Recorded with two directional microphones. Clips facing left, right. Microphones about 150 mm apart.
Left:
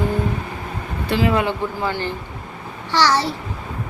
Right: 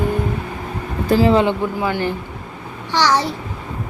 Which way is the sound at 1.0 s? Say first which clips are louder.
Right 5 dB; 40° right (ahead or behind).